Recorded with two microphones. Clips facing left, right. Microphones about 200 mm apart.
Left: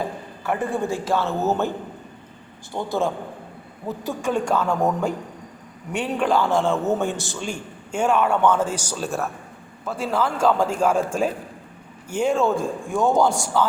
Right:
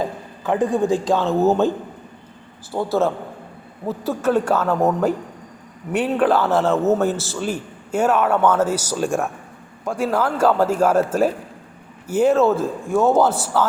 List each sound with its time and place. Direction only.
0.4 s a man's voice: 15° right (ahead or behind)
2.7 s a man's voice: 5° right (ahead or behind)
5.9 s a man's voice: 5° right (ahead or behind)